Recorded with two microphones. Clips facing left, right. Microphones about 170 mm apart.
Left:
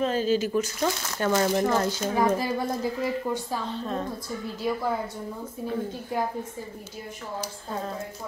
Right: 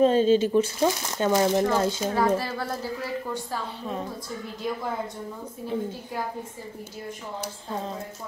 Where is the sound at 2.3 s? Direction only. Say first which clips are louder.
Left 1 dB; 15° left (ahead or behind).